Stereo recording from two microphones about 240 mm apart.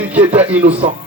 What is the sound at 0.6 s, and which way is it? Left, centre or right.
Speech, right.